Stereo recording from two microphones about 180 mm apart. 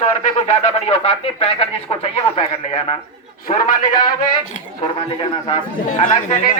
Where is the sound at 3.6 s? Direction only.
50° left (ahead or behind).